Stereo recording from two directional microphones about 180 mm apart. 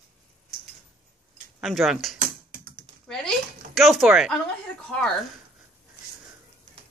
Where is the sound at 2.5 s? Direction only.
55° right (ahead or behind).